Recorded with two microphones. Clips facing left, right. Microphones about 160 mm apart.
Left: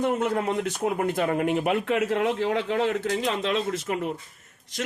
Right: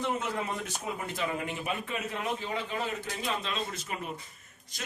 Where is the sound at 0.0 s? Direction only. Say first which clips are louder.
Left 8 dB; 55° left (ahead or behind).